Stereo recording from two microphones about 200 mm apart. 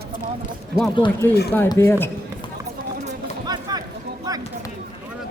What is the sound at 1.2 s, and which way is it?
Speech, 10° left (ahead or behind).